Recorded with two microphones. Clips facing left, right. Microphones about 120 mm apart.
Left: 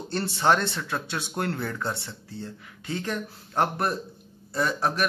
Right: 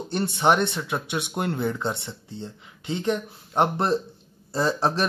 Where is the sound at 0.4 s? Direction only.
20° right (ahead or behind).